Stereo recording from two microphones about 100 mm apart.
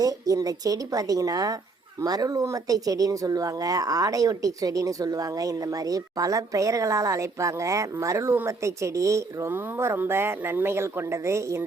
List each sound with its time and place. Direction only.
0.0 s speech: 35° right (ahead or behind)